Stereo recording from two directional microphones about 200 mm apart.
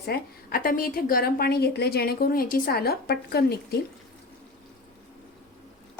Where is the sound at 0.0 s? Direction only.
50° left (ahead or behind).